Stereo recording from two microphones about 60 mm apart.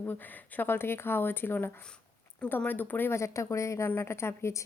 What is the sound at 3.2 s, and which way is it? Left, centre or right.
A woman's voice, left.